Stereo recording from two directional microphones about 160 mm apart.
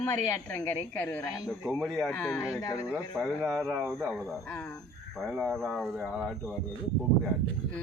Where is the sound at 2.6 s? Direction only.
20° left (ahead or behind).